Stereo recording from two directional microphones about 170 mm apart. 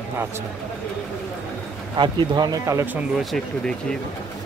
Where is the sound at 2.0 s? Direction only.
25° right (ahead or behind); by 3.3 s 10° right (ahead or behind).